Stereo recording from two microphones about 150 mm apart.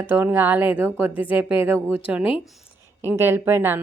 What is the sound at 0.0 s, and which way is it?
A woman's voice, 15° right (ahead or behind).